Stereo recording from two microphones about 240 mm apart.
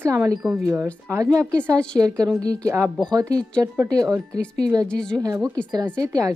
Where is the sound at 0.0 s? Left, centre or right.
Centre.